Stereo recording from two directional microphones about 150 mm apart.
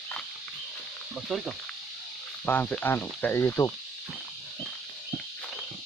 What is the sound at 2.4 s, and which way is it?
Insect, 10° left (ahead or behind).